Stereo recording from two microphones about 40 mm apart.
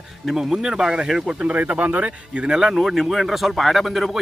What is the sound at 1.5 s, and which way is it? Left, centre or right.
Speech, right.